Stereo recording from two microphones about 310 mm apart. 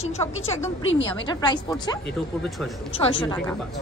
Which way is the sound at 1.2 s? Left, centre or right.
Centre.